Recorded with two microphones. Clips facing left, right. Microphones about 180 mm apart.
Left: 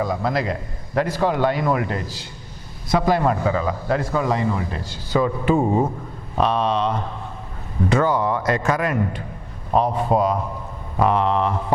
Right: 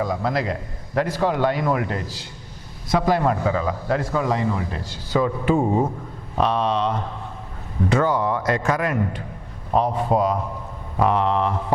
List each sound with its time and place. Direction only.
0.0 s a man's voice: 15° left (ahead or behind)
5.5 s speech: 30° left (ahead or behind)
6.4 s a man's voice: 15° left (ahead or behind)